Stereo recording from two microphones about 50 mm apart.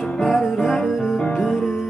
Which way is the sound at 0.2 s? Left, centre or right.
Centre.